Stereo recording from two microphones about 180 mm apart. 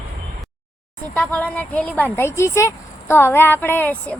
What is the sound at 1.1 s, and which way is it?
Speech, 5° left (ahead or behind).